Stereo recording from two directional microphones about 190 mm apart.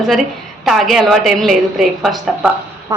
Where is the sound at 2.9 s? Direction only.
20° right (ahead or behind).